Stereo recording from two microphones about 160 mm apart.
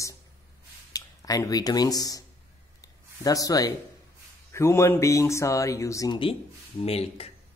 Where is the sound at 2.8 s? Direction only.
20° left (ahead or behind).